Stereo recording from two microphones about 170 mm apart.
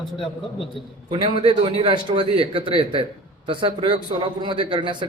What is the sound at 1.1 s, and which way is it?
A man's voice, 30° right (ahead or behind).